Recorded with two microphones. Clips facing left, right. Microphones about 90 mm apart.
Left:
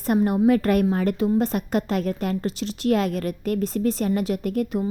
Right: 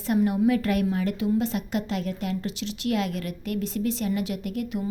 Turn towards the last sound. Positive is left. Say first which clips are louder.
# left 5 dB
turn(degrees=45)  # may be behind; listen again after turning